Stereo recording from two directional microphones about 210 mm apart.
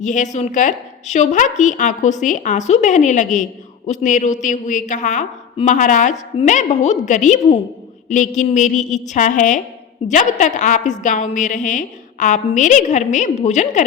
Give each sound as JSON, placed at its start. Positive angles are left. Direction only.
{"t": 0.0, "sound": "a woman's voice", "side_deg": 35}